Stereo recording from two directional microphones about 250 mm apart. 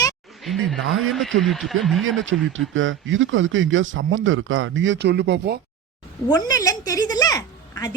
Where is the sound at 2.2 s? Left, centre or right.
Right.